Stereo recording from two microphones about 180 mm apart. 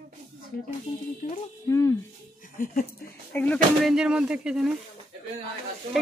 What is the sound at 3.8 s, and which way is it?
Speech, 5° right (ahead or behind).